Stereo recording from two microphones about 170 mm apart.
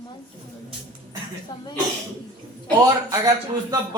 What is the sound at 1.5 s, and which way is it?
Speech, 25° left (ahead or behind).